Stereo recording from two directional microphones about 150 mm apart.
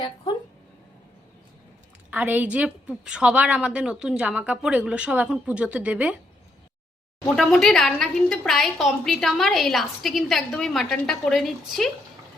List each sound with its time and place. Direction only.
0.3 s a sound: 30° left (ahead or behind)
2.0 s a woman's voice: 10° right (ahead or behind)
7.3 s a woman's voice: centre (ahead or behind)